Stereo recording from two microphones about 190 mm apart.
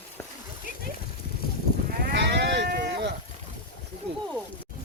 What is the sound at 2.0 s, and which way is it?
Sheep, 65° right (ahead or behind).